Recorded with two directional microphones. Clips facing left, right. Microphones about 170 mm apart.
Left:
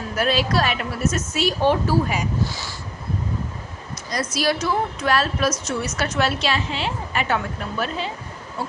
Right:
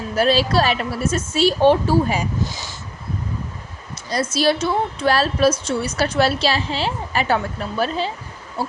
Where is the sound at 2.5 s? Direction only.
20° right (ahead or behind).